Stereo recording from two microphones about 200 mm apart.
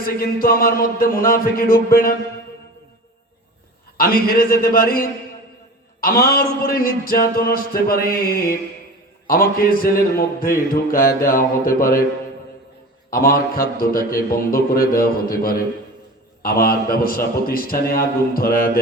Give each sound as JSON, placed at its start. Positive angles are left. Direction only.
{"t": 0.0, "sound": "a man's voice", "side_deg": 45}
{"t": 3.9, "sound": "a man's voice", "side_deg": 50}
{"t": 13.1, "sound": "a man's voice", "side_deg": 45}